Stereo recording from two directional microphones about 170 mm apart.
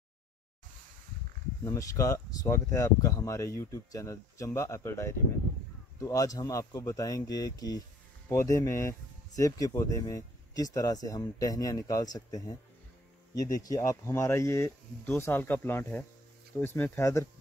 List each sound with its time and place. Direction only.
1.6 s speech: 20° left (ahead or behind)